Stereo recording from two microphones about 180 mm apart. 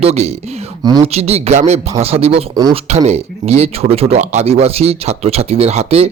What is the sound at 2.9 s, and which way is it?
A man's voice, 35° right (ahead or behind).